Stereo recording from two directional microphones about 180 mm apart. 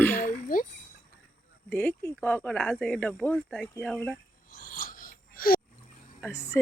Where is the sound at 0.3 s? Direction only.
50° left (ahead or behind).